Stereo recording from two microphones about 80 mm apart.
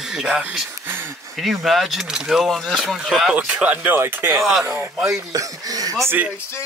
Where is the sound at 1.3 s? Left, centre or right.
Centre.